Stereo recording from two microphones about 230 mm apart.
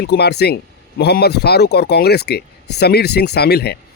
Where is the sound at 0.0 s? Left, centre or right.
Left.